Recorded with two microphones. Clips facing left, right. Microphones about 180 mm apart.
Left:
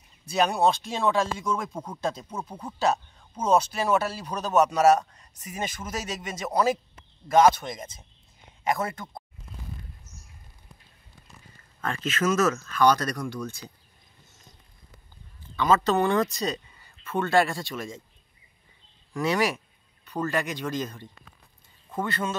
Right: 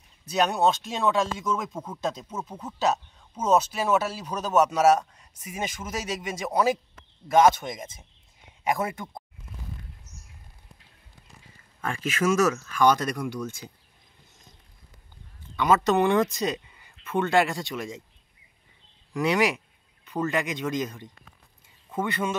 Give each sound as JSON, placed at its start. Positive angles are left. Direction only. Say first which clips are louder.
{"t": 0.2, "sound": "speech", "louder": "even", "side_deg": 0}
{"t": 11.8, "sound": "speech", "louder": "right 1 dB", "side_deg": -10}
{"t": 15.6, "sound": "speech", "louder": "right 1 dB", "side_deg": -15}
{"t": 19.1, "sound": "speech", "louder": "right 2 dB", "side_deg": -20}